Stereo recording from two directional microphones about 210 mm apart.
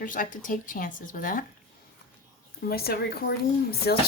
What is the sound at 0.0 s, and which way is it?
Speech, 40° left (ahead or behind).